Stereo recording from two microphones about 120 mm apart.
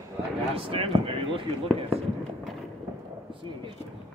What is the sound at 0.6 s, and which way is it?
Speech, 50° right (ahead or behind).